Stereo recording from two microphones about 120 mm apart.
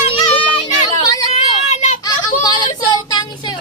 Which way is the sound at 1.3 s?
70° left (ahead or behind).